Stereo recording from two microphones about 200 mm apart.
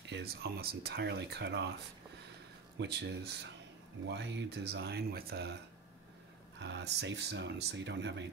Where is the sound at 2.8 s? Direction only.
60° right (ahead or behind).